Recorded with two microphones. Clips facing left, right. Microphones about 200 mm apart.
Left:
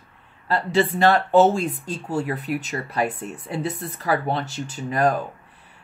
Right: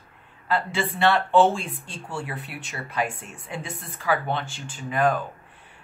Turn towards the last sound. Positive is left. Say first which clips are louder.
# left 2 dB
turn(degrees=40)  # may be behind; listen again after turning